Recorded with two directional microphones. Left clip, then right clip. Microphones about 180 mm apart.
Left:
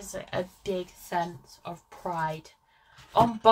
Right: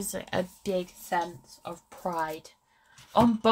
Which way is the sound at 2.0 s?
35° right (ahead or behind).